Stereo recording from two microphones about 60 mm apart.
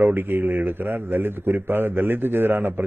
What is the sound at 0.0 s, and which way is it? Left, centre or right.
A man's voice, right.